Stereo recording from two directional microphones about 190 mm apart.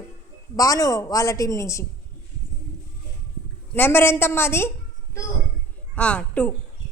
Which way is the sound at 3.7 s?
10° left (ahead or behind).